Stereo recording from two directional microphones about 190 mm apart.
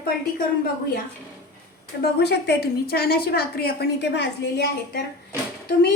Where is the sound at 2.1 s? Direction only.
60° left (ahead or behind).